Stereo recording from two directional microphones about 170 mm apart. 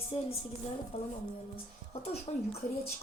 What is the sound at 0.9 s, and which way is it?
Speech, 35° left (ahead or behind).